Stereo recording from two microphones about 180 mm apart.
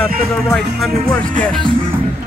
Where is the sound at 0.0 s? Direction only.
5° left (ahead or behind).